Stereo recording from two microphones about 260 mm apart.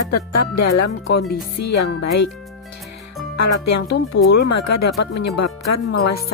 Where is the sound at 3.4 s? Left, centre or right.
Left.